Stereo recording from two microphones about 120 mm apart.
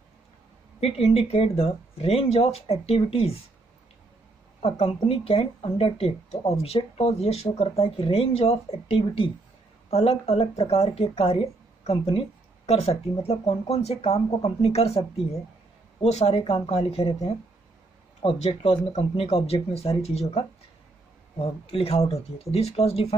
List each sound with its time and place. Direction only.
0.7 s speech: 55° left (ahead or behind)
4.6 s speech: 55° left (ahead or behind)
18.4 s speech: 55° left (ahead or behind)